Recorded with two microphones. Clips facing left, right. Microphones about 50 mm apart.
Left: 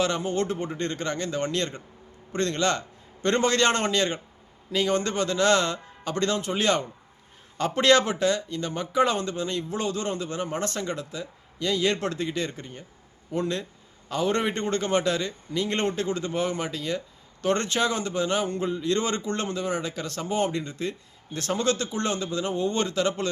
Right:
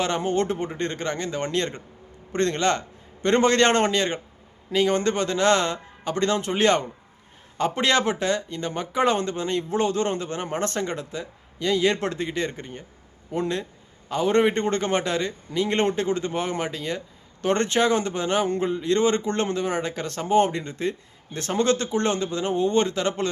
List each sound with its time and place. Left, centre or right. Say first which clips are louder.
0.0 s a man's voice: right 2 dB; right
7.6 s a man's voice: left 1 dB; right